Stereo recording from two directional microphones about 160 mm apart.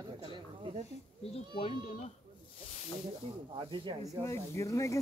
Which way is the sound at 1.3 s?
35° left (ahead or behind).